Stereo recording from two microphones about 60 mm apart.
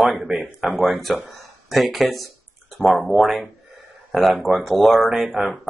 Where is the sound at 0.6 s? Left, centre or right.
Right.